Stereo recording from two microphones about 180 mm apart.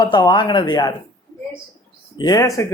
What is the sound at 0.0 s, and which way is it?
Speech, 25° left (ahead or behind).